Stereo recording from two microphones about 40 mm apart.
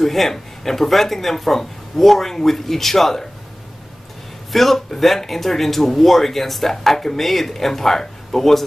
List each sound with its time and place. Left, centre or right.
0.0 s speech: centre
4.5 s speech: centre